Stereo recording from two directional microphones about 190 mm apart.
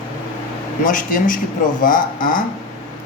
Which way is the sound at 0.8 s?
45° left (ahead or behind).